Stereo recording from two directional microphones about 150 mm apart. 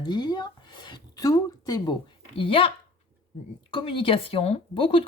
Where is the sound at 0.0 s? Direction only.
30° left (ahead or behind).